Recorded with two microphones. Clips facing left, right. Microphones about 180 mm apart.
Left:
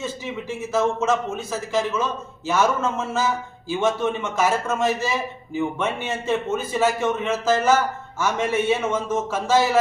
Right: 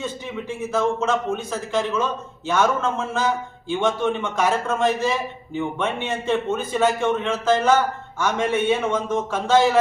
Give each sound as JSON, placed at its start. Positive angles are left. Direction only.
{"t": 0.7, "sound": "a man's voice", "side_deg": 5}
{"t": 2.5, "sound": "a man's voice", "side_deg": 5}